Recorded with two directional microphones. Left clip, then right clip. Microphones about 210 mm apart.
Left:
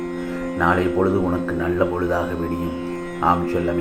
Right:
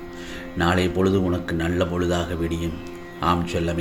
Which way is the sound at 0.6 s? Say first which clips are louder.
Left 2 dB; 55° right (ahead or behind).